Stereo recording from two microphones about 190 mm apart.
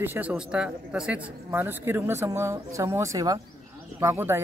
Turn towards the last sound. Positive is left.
turn(degrees=-15)  # may be behind; listen again after turning